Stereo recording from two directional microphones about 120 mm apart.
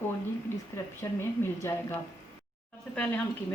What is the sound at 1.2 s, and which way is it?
Speech, 20° left (ahead or behind).